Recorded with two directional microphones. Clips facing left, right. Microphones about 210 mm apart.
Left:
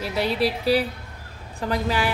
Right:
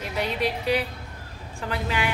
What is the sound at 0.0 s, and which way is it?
Speech, 35° left (ahead or behind).